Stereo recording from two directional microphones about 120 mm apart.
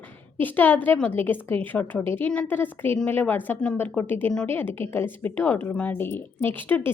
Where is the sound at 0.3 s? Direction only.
15° left (ahead or behind).